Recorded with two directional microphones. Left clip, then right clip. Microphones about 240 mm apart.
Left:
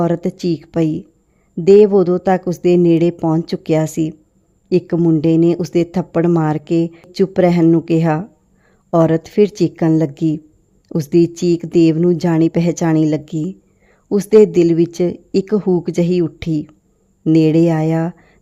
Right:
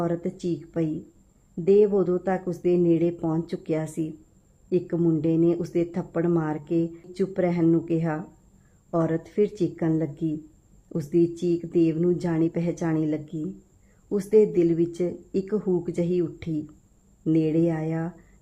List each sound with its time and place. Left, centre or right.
0.0 s speech: left